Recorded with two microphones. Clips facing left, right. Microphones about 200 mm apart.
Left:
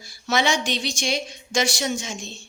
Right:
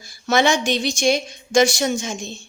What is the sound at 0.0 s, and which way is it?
A woman's voice, 50° right (ahead or behind).